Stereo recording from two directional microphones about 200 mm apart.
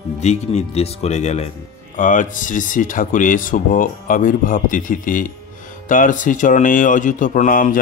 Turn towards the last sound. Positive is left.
turn(degrees=40)  # may be behind; listen again after turning